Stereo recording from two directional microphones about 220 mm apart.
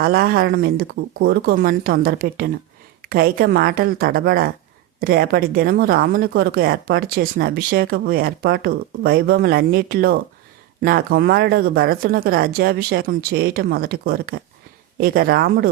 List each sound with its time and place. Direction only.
0.0 s speech: 45° right (ahead or behind)